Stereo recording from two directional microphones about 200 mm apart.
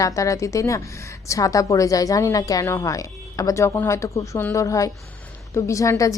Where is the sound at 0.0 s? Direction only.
15° left (ahead or behind).